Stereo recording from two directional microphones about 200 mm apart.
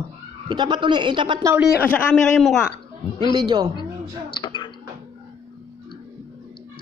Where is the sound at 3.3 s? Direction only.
20° right (ahead or behind).